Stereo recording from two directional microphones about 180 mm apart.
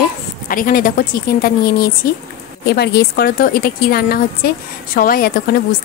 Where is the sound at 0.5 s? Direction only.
50° left (ahead or behind).